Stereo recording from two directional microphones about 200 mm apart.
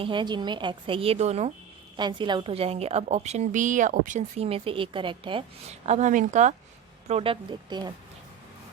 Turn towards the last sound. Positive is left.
turn(degrees=-20)  # may be behind; listen again after turning